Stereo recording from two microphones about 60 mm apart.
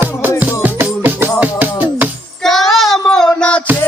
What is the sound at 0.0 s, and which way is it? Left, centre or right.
Music, right.